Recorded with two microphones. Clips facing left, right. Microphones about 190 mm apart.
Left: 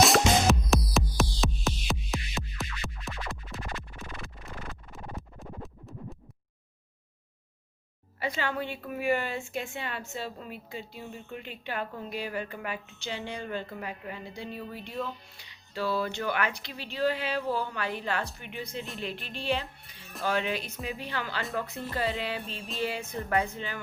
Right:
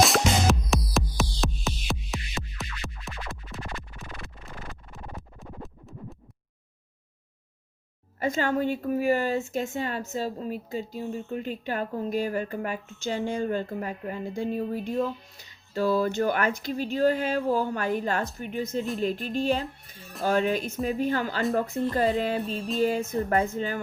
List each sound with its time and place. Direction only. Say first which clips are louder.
0.0 s music: even; centre (ahead or behind)
8.2 s a woman's voice: right 7 dB; 45° right (ahead or behind)